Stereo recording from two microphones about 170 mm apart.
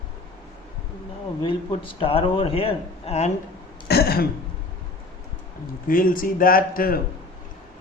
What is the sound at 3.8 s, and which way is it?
Speech, 65° left (ahead or behind).